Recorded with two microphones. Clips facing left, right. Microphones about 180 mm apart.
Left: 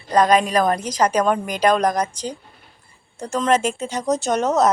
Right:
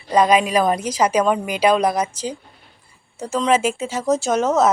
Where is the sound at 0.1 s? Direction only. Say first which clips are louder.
Right 1 dB; 10° right (ahead or behind).